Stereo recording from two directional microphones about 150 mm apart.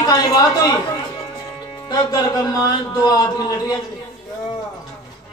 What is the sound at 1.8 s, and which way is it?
Speech, 25° left (ahead or behind).